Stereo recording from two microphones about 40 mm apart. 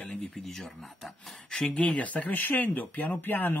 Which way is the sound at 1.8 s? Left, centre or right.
Left.